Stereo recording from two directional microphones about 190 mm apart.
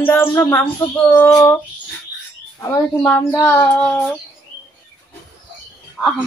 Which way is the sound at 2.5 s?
15° left (ahead or behind).